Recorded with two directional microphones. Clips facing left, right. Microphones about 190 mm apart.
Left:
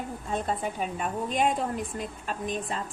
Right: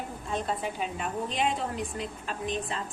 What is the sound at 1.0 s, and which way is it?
A woman's voice, 45° left (ahead or behind).